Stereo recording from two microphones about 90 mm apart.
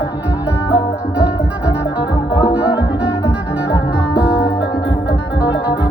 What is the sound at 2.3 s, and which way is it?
Music, 55° left (ahead or behind).